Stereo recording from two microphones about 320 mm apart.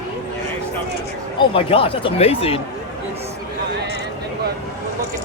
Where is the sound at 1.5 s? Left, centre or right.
Centre.